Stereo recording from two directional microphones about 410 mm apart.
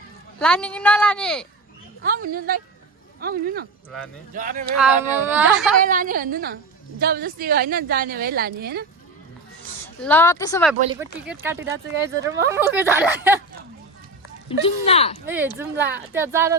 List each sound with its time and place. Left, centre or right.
0.3 s speech: centre
2.0 s a woman's voice: right
4.8 s speech: centre
5.8 s a woman's voice: centre
9.8 s speech: centre
11.0 s speech: centre
14.8 s speech: centre
15.3 s speech: centre